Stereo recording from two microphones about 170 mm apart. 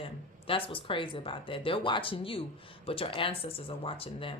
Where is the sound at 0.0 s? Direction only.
30° left (ahead or behind).